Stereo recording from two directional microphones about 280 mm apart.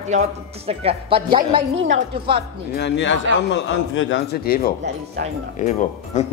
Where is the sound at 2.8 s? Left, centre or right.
Left.